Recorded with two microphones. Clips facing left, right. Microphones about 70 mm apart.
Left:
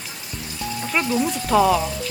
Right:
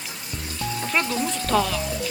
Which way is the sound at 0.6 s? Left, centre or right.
Centre.